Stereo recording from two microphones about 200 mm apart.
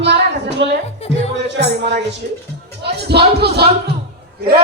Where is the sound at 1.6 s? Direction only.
55° right (ahead or behind).